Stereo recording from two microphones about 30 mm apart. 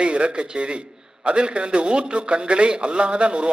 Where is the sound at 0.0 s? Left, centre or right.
Right.